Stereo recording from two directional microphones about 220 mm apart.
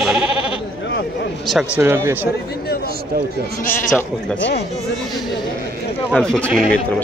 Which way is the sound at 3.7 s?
5° left (ahead or behind).